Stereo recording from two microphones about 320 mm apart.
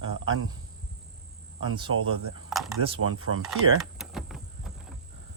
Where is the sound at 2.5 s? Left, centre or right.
Centre.